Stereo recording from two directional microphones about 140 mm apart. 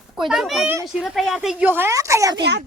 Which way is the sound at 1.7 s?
20° right (ahead or behind).